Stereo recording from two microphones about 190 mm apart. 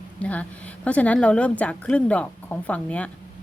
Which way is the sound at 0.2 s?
5° left (ahead or behind).